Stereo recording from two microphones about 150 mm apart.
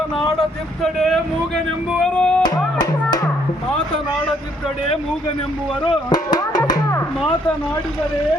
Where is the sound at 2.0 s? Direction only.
5° left (ahead or behind).